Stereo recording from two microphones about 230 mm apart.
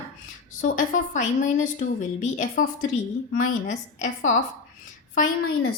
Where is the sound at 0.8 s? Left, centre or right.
Left.